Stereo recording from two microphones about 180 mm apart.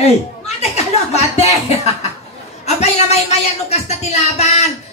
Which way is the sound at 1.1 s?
35° left (ahead or behind).